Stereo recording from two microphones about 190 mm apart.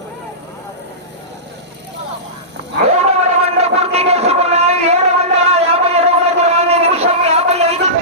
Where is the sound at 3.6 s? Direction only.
35° right (ahead or behind).